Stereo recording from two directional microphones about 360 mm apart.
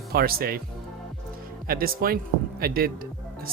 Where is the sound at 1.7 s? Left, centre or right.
Right.